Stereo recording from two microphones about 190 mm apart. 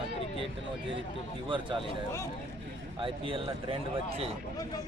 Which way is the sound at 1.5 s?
25° right (ahead or behind).